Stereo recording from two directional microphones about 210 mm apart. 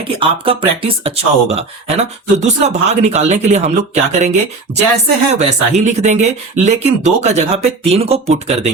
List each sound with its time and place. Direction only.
0.0 s speech: 25° right (ahead or behind)